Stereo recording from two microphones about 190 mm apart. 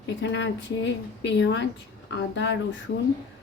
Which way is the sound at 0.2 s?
70° left (ahead or behind).